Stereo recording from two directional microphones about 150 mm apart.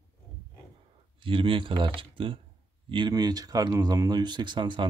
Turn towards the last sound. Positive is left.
turn(degrees=-30)  # may be behind; listen again after turning